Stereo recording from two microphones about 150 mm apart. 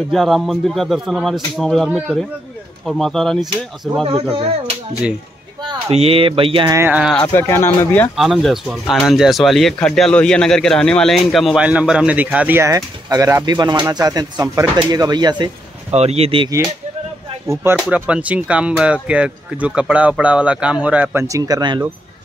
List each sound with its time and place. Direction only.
0.1 s a man's voice: centre (ahead or behind)
4.0 s speech: 40° right (ahead or behind)
5.9 s speech: 40° right (ahead or behind)
6.7 s speech: 15° right (ahead or behind)
7.2 s speech: 15° left (ahead or behind)
8.2 s a man's voice: centre (ahead or behind); by 15.5 s 30° right (ahead or behind)
15.9 s speech: 45° right (ahead or behind)
17.8 s speech: 10° right (ahead or behind); by 21.8 s 25° right (ahead or behind)